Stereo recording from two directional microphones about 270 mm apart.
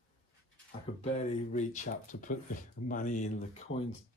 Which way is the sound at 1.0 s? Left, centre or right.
Left.